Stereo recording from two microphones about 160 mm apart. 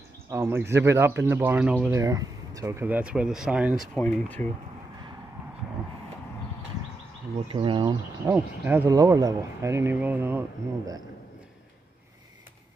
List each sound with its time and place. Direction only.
0.3 s speech: 15° right (ahead or behind)
2.0 s speech: 20° right (ahead or behind); by 3.9 s 5° right (ahead or behind)
3.9 s speech: 5° left (ahead or behind)
7.4 s speech: 30° right (ahead or behind)
8.3 s speech: 10° right (ahead or behind)